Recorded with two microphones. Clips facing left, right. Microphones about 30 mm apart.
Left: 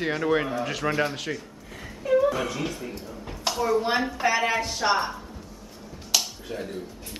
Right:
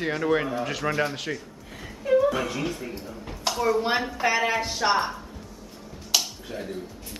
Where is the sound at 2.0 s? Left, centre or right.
Centre.